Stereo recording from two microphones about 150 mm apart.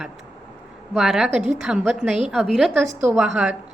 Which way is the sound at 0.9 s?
5° right (ahead or behind).